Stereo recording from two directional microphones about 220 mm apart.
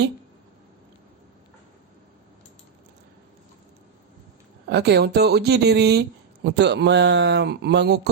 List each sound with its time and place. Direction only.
4.7 s speech: 50° right (ahead or behind)